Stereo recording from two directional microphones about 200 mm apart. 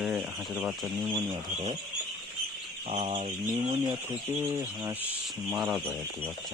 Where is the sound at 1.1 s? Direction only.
20° right (ahead or behind).